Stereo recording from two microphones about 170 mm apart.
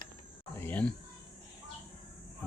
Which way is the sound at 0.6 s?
10° left (ahead or behind).